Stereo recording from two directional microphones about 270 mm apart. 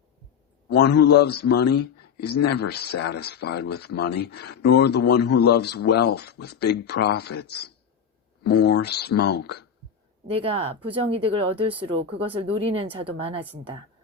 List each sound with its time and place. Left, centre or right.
0.8 s speech: left
10.3 s speech: right